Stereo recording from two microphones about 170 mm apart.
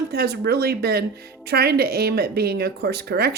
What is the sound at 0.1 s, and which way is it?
Speech, 70° right (ahead or behind).